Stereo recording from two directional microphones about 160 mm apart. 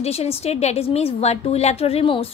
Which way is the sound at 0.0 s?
40° left (ahead or behind).